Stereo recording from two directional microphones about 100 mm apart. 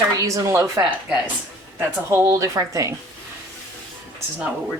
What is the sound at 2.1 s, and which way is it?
Speech, 30° right (ahead or behind).